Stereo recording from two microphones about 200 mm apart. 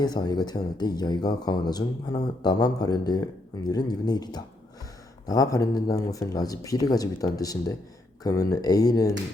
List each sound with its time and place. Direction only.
0.0 s speech: 20° left (ahead or behind)